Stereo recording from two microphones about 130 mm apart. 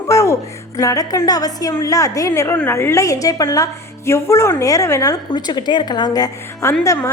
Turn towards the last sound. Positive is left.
turn(degrees=25)  # may be behind; listen again after turning